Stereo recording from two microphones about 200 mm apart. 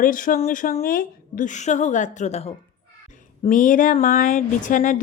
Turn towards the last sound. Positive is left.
turn(degrees=40)  # may be behind; listen again after turning